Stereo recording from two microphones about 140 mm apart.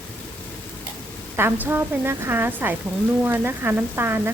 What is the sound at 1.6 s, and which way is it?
Speech, 15° right (ahead or behind).